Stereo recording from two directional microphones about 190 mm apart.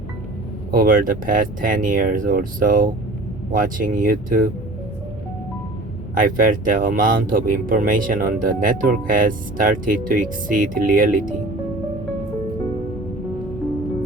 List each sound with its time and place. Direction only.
0.7 s speech: 45° right (ahead or behind)
6.1 s speech: 45° right (ahead or behind)